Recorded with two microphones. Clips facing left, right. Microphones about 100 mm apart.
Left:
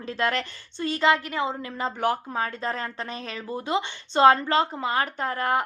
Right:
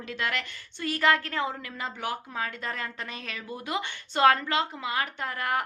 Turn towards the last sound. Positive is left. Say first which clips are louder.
# left 5 dB
turn(degrees=30)  # may be behind; listen again after turning